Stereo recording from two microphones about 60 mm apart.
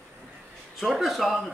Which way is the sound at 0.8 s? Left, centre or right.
Centre.